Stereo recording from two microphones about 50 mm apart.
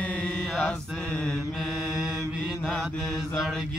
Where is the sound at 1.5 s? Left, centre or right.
Centre.